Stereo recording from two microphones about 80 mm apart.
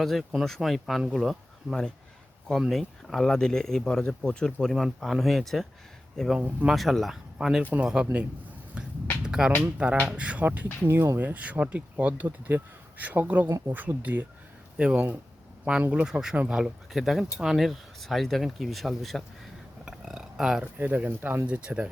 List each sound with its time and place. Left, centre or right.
0.0 s speech: centre
7.6 s speech: right
8.8 s a sound: centre
9.2 s music: centre
9.7 s speech: centre
10.8 s speech: right
14.8 s speech: centre
19.8 s a sound: centre
20.7 s speech: right